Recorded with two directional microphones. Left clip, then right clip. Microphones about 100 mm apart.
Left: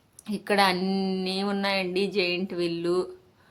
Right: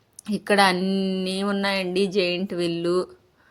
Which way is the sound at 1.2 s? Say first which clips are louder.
Right 2 dB; 40° right (ahead or behind).